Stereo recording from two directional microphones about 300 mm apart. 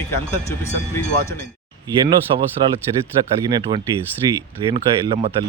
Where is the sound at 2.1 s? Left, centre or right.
Centre.